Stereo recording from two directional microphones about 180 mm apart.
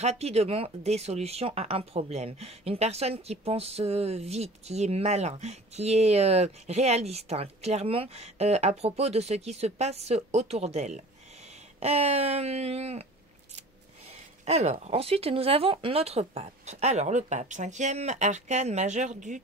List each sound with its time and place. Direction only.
0.0 s speech: 35° right (ahead or behind)
14.4 s speech: 40° right (ahead or behind)